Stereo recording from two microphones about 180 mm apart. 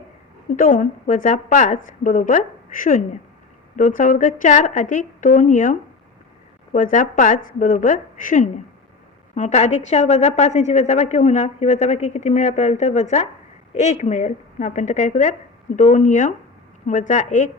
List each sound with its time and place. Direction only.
0.5 s a woman's voice: 45° left (ahead or behind)
6.7 s a woman's voice: 50° left (ahead or behind)